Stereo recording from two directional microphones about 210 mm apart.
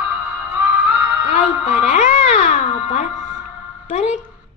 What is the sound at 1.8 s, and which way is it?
Music, 35° left (ahead or behind).